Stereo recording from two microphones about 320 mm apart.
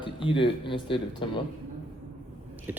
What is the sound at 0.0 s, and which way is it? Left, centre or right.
Speech, centre.